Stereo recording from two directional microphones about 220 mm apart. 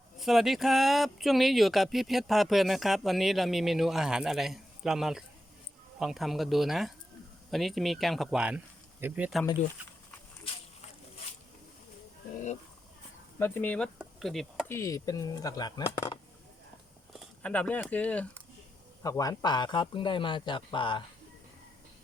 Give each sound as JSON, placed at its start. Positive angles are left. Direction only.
{"t": 0.2, "sound": "speech", "side_deg": 0}
{"t": 13.4, "sound": "speech", "side_deg": 10}
{"t": 14.7, "sound": "speech", "side_deg": 15}
{"t": 17.2, "sound": "speech", "side_deg": 5}
{"t": 19.0, "sound": "a man's voice", "side_deg": 15}